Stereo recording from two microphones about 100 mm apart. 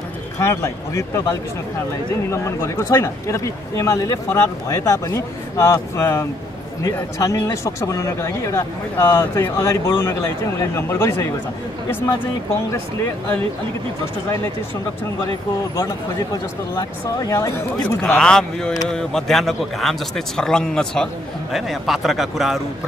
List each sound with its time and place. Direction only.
0.4 s speech: 30° left (ahead or behind)
2.3 s a man's voice: 30° left (ahead or behind)
17.2 s speech: 35° left (ahead or behind)
17.8 s a man's voice: 10° left (ahead or behind)